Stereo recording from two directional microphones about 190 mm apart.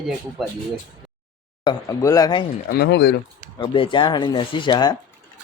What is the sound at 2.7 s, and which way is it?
Speech, 60° left (ahead or behind).